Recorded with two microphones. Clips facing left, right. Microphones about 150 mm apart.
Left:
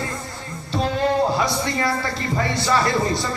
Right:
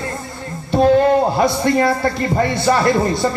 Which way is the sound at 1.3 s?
55° right (ahead or behind).